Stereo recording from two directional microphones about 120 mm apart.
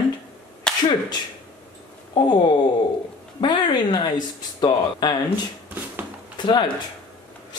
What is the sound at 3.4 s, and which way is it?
Speech, 40° left (ahead or behind).